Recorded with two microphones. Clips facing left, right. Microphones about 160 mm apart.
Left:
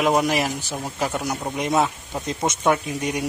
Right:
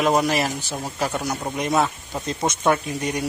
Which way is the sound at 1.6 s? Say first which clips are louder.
Even; 15° left (ahead or behind).